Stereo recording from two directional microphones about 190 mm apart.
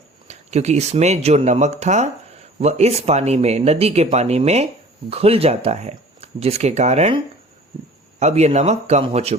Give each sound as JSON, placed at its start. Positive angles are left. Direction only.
{"t": 0.3, "sound": "speech", "side_deg": -35}
{"t": 8.2, "sound": "speech", "side_deg": -35}